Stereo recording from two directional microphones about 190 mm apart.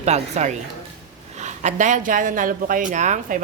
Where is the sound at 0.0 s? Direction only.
35° right (ahead or behind).